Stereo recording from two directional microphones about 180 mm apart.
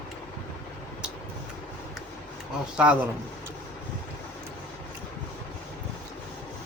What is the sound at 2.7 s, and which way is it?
Speech, 5° right (ahead or behind).